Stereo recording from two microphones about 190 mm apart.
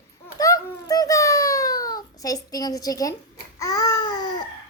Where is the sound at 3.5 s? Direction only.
20° left (ahead or behind).